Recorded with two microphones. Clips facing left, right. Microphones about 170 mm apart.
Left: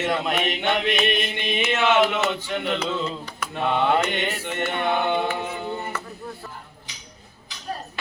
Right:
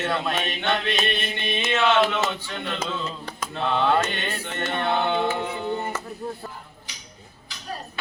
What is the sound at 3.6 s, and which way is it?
Mantra, 15° left (ahead or behind).